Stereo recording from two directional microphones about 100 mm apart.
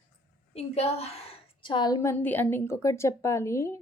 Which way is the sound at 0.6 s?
90° left.